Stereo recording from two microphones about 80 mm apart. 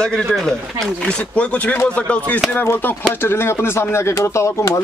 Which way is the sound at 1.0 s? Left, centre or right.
Centre.